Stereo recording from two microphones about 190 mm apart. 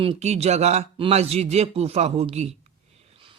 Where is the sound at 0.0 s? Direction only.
30° right (ahead or behind).